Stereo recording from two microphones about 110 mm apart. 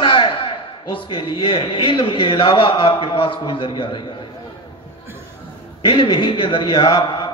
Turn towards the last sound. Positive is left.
turn(degrees=45)  # may be behind; listen again after turning